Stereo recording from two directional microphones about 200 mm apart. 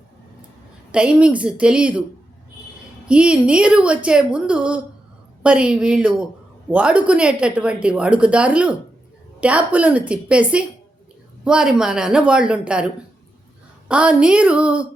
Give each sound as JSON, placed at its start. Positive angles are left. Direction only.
{"t": 0.9, "sound": "speech", "side_deg": -5}
{"t": 3.1, "sound": "a woman's voice", "side_deg": -5}